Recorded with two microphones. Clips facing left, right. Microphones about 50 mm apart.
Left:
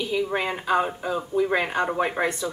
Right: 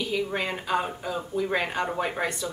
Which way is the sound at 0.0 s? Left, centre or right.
Centre.